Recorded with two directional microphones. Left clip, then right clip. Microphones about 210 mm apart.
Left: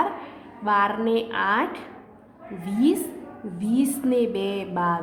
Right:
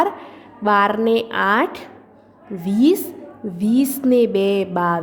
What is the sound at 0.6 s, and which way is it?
A woman's voice, 40° right (ahead or behind).